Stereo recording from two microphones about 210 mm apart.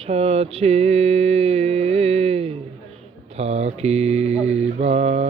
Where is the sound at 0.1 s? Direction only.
30° right (ahead or behind).